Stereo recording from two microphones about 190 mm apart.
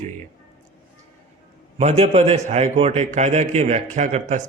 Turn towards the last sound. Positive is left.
turn(degrees=-35)  # may be behind; listen again after turning